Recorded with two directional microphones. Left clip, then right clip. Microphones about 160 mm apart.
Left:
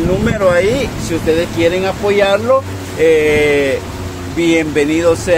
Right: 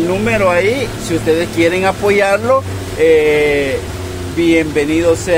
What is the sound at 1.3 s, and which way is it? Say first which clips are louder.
Speech: even; 15° right (ahead or behind).